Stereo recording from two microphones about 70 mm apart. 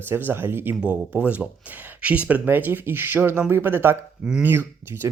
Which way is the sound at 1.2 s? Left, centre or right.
Centre.